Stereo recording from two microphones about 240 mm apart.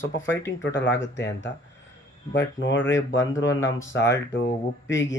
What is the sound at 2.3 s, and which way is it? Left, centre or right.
Speech, left.